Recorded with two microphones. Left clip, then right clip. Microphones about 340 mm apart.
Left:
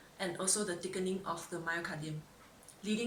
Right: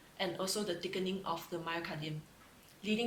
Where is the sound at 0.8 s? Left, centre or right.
Centre.